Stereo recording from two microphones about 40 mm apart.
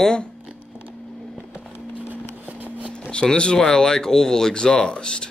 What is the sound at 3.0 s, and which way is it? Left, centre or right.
Speech, left.